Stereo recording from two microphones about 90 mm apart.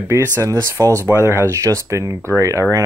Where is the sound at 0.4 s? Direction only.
35° right (ahead or behind).